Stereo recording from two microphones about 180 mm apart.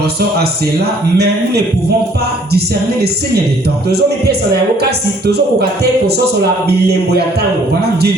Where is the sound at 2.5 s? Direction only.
65° right (ahead or behind).